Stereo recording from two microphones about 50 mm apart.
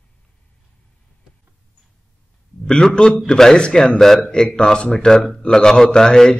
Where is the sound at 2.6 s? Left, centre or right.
Centre.